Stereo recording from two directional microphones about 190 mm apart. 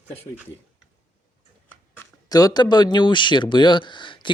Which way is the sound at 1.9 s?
20° left (ahead or behind).